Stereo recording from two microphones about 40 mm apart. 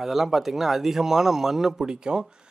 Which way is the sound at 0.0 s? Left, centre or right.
Centre.